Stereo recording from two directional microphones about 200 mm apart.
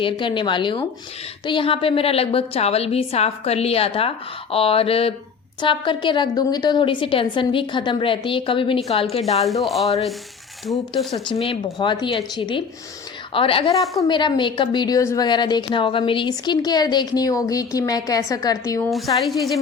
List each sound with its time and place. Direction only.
0.0 s a woman's voice: 25° left (ahead or behind)
9.4 s speech: centre (ahead or behind)
11.1 s a woman's voice: 25° left (ahead or behind)
19.1 s speech: centre (ahead or behind)